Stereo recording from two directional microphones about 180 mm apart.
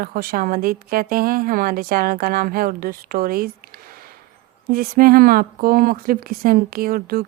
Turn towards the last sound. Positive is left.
turn(degrees=-55)  # may be behind; listen again after turning